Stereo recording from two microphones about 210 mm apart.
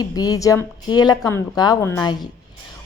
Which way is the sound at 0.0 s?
20° left (ahead or behind).